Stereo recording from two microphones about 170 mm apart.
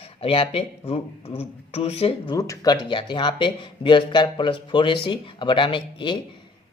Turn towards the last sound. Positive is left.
turn(degrees=30)  # may be behind; listen again after turning